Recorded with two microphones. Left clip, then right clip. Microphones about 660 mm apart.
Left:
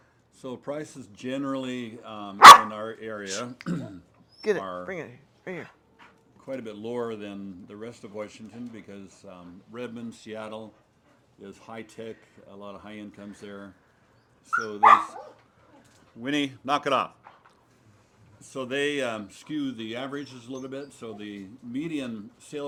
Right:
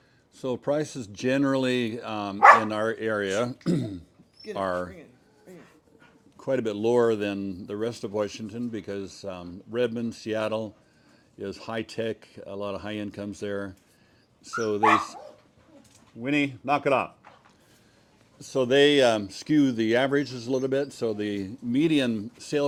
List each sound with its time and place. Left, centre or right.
0.3 s speech: right
6.4 s speech: right
16.2 s a man's voice: right
18.3 s speech: right